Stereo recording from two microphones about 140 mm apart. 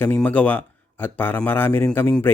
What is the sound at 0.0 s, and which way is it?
Speech, 10° left (ahead or behind).